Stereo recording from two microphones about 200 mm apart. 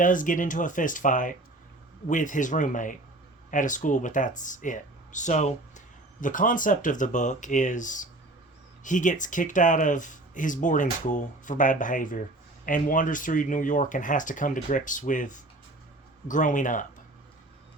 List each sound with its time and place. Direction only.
0.0 s speech: 40° left (ahead or behind)